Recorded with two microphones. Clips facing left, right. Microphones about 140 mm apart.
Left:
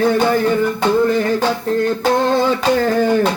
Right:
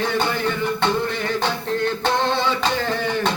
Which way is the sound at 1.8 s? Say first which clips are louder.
Left 5 dB; 40° left (ahead or behind).